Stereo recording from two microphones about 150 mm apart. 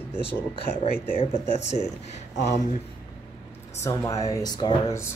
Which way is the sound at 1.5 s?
45° left (ahead or behind).